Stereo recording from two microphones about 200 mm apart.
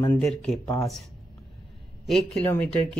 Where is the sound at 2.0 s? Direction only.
Centre (ahead or behind).